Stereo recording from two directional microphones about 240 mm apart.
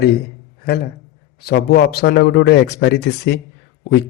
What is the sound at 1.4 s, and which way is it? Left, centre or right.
A man's voice, left.